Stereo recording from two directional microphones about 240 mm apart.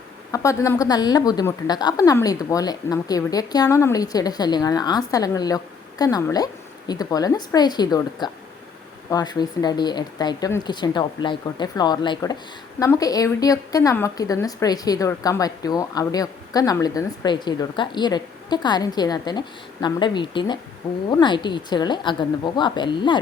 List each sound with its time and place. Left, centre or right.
0.3 s a woman's voice: centre